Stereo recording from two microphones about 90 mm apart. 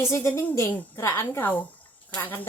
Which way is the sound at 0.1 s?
30° left (ahead or behind).